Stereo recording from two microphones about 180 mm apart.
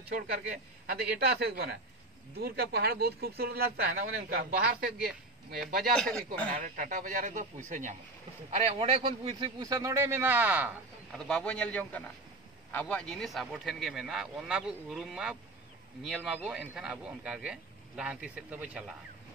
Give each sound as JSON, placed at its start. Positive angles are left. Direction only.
{"t": 0.8, "sound": "speech", "side_deg": -60}
{"t": 5.9, "sound": "a man's voice", "side_deg": 5}
{"t": 6.6, "sound": "speech", "side_deg": -45}
{"t": 11.1, "sound": "a man's voice", "side_deg": 5}